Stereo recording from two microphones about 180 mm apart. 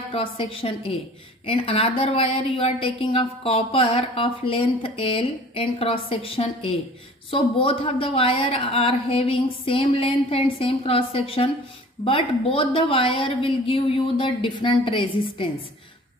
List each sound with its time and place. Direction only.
0.1 s a woman's voice: 30° left (ahead or behind)